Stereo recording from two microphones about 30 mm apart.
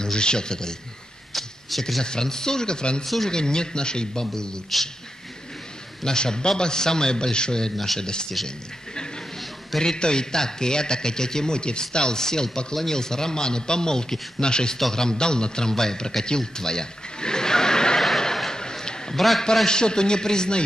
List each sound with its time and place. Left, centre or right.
0.0 s a man's voice: left
1.3 s a sound: centre
2.0 s a man's voice: left
4.7 s a man's voice: centre
6.0 s a man's voice: left
7.7 s speech: centre
8.0 s a man's voice: left
9.8 s a man's voice: left
16.3 s chuckle: left
18.5 s a sound: left
19.1 s a man's voice: centre
19.7 s a man's voice: left